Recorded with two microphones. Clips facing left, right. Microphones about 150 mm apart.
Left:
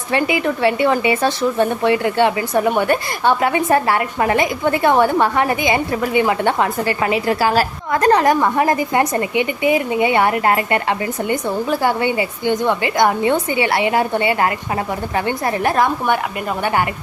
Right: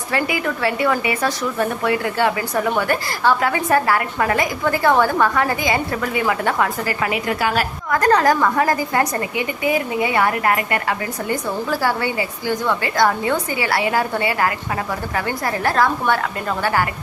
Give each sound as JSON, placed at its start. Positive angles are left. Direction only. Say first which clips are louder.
{"t": 0.1, "sound": "a woman's voice", "louder": "left 4 dB", "side_deg": 25}